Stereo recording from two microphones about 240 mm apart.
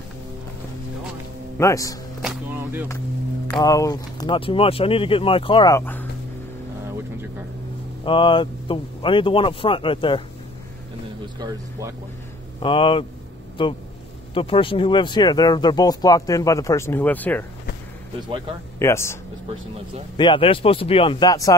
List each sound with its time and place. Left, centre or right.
1.6 s speech: centre
2.2 s a sound: centre
3.6 s speech: centre
8.0 s speech: left
11.3 s speech: centre
12.6 s speech: left
18.8 s speech: centre
20.2 s speech: left